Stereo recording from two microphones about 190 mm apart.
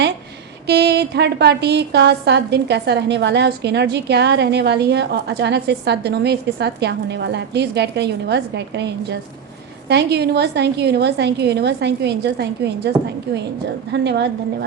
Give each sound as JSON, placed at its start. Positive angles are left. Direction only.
{"t": 0.7, "sound": "a woman's voice", "side_deg": -60}
{"t": 13.9, "sound": "a woman's voice", "side_deg": -65}